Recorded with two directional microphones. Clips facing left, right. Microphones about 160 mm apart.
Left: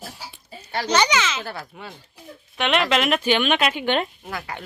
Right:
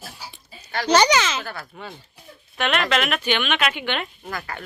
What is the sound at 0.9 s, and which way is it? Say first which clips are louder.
Speech: right 4 dB; 40° right (ahead or behind).